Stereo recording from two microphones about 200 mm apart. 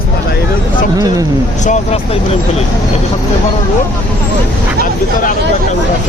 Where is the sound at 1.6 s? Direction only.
35° left (ahead or behind).